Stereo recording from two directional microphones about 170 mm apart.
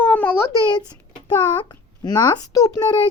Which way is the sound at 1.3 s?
25° left (ahead or behind).